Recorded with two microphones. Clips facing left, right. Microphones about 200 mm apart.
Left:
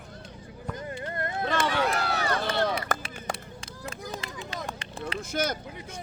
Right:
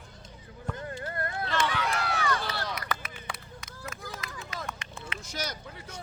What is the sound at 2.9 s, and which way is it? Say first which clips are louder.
Run: left 4 dB; 45° left (ahead or behind).